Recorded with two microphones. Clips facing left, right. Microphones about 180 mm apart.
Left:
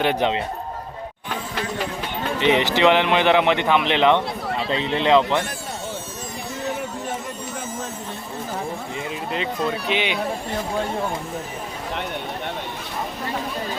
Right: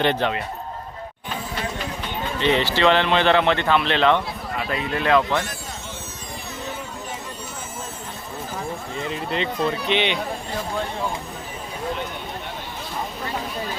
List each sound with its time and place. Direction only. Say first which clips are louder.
0.2 s speech: left 2 dB; 20° left (ahead or behind)
2.4 s speech: left 2 dB; 15° left (ahead or behind)
9.0 s speech: right 2 dB; 5° left (ahead or behind)